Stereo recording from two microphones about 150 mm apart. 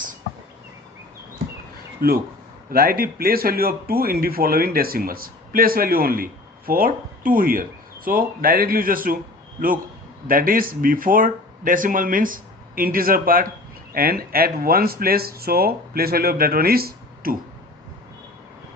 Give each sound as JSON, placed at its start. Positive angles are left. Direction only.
{"t": 2.0, "sound": "speech", "side_deg": -80}
{"t": 10.2, "sound": "speech", "side_deg": -70}
{"t": 13.9, "sound": "speech", "side_deg": -85}